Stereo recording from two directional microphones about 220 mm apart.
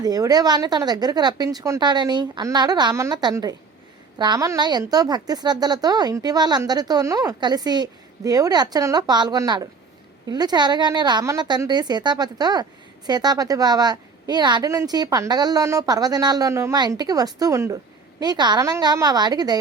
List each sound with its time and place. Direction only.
0.0 s a woman's voice: 15° right (ahead or behind)